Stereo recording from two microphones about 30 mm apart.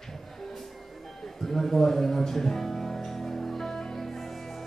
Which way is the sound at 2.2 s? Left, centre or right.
Centre.